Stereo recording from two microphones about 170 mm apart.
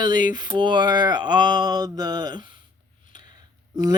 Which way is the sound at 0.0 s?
25° right (ahead or behind).